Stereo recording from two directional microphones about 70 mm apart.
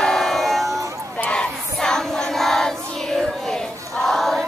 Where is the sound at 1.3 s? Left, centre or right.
Centre.